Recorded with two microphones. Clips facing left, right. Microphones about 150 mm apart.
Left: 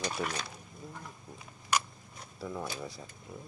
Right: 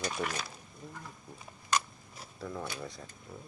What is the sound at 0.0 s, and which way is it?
Speech, 5° right (ahead or behind).